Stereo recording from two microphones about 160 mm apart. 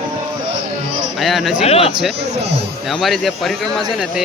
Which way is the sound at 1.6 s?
40° left (ahead or behind).